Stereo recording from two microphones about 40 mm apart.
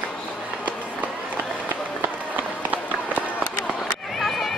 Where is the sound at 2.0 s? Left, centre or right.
Right.